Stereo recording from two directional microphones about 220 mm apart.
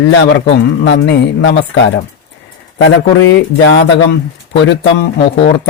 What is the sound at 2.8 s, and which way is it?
A man's voice, 55° left (ahead or behind).